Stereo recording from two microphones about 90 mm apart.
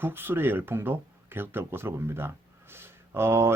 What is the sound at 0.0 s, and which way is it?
Speech, 25° right (ahead or behind).